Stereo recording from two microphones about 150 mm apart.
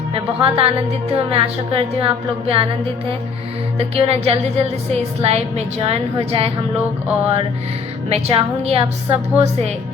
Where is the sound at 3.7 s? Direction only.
40° right (ahead or behind).